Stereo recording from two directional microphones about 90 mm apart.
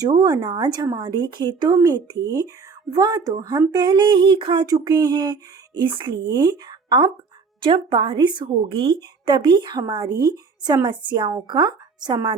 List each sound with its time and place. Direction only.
0.0 s speech: 45° right (ahead or behind); by 4.6 s 60° right (ahead or behind)
4.6 s speech: 45° right (ahead or behind); by 6.1 s 65° right (ahead or behind)
6.2 s speech: 50° right (ahead or behind)